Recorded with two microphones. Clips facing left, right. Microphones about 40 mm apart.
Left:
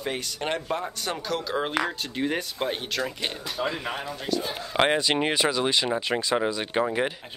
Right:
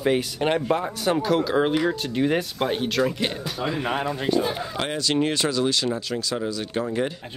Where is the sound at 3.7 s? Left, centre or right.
Right.